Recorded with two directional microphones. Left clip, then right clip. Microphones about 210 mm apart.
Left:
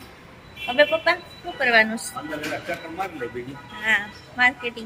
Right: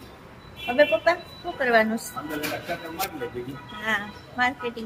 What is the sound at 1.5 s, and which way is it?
Speech, 15° right (ahead or behind).